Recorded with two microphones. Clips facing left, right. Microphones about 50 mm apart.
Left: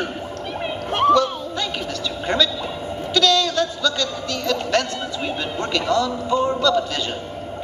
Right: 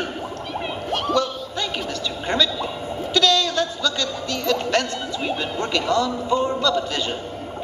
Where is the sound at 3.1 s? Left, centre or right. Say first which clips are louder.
Left 1 dB; centre.